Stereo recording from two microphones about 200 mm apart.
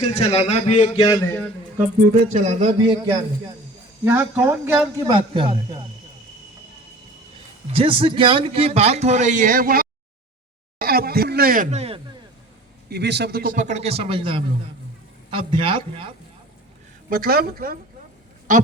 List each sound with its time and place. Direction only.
0.0 s a man's voice: 30° left (ahead or behind)
0.9 s a man's voice: 20° left (ahead or behind)
2.3 s speech: 35° right (ahead or behind)
2.8 s a man's voice: 20° right (ahead or behind)
4.0 s speech: 10° right (ahead or behind)
5.1 s a man's voice: 25° right (ahead or behind)
7.7 s speech: 25° right (ahead or behind); by 9.8 s 45° right (ahead or behind)
10.8 s a sound: 50° right (ahead or behind); by 11.9 s 35° right (ahead or behind)
12.9 s a man's voice: 55° right (ahead or behind); by 16.1 s 25° right (ahead or behind)
17.1 s speech: 50° right (ahead or behind)